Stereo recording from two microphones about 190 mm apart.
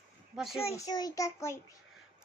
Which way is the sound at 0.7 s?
20° left (ahead or behind).